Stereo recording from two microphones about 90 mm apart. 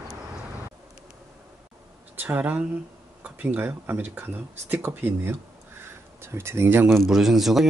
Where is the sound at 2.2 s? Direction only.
20° right (ahead or behind).